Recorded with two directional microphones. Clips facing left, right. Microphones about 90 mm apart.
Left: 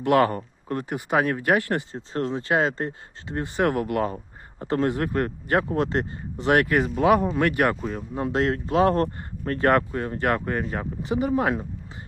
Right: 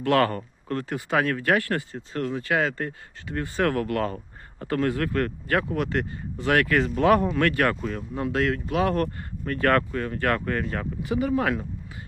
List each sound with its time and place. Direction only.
0.0 s speech: 20° left (ahead or behind)
8.2 s speech: 25° left (ahead or behind)
9.6 s speech: 25° left (ahead or behind)